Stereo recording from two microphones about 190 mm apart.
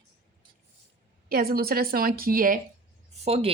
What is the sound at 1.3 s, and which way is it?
Speech, 55° right (ahead or behind).